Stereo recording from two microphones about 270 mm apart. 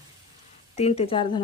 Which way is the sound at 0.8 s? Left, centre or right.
Left.